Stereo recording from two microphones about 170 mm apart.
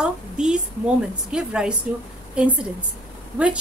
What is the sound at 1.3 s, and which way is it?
A woman's voice, 5° right (ahead or behind).